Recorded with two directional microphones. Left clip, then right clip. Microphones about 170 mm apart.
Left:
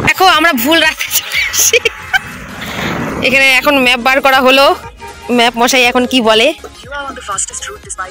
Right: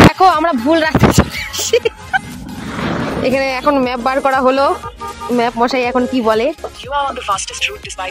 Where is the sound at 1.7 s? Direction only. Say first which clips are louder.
Left 3 dB; 25° right (ahead or behind).